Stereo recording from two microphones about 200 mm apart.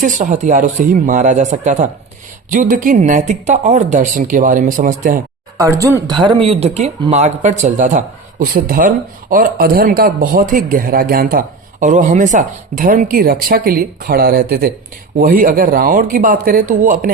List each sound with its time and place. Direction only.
0.0 s speech: 40° right (ahead or behind)
5.5 s a man's voice: 15° right (ahead or behind); by 17.1 s 40° right (ahead or behind)